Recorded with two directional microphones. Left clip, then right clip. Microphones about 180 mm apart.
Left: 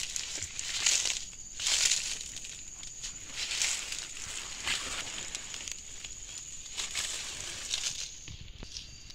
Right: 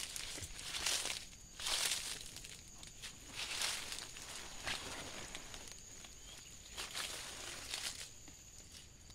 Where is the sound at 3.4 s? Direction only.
10° left (ahead or behind).